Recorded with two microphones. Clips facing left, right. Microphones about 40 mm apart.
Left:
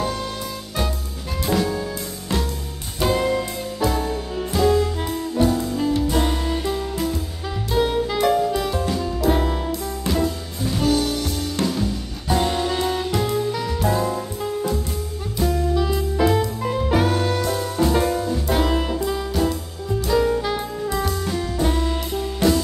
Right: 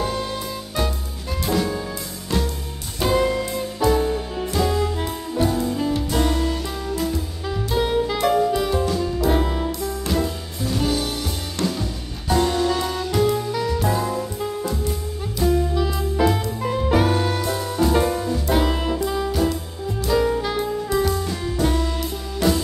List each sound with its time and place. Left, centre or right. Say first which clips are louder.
0.0 s music: even; centre
1.4 s music: left 1 dB; centre
3.0 s music: even; centre
6.2 s music: right 1 dB; centre
7.0 s music: even; centre
12.4 s music: right 2 dB; centre
13.1 s music: right 2 dB; centre
20.1 s saxophone: even; centre